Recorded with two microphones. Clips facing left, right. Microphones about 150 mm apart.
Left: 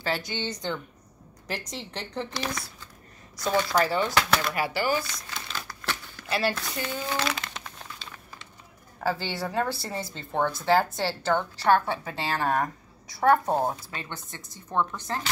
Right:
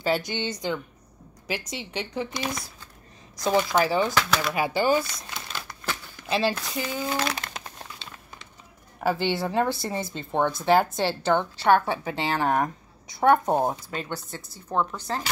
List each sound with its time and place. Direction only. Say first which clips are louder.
0.0 s a woman's voice: right 4 dB; 15° right (ahead or behind)
1.8 s a woman's voice: right 3 dB; 10° right (ahead or behind)
3.7 s a woman's voice: right 2 dB; 15° right (ahead or behind)
9.0 s a woman's voice: right 4 dB; 20° right (ahead or behind)